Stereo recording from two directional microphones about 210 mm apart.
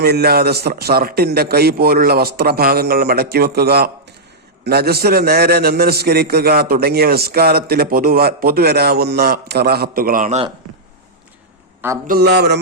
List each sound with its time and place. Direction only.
0.0 s a man's voice: 50° right (ahead or behind)
12.0 s a man's voice: 45° right (ahead or behind)